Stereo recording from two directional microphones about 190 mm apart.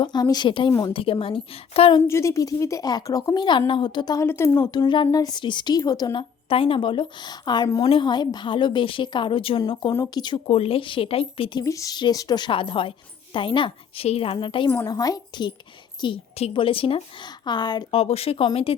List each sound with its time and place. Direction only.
0.0 s a woman's voice: 20° left (ahead or behind)
0.9 s speech: 30° left (ahead or behind)
2.0 s speech: 15° left (ahead or behind)
14.7 s speech: 15° left (ahead or behind)